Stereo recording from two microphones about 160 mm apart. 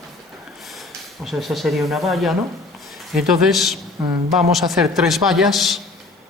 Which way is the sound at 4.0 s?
15° right (ahead or behind).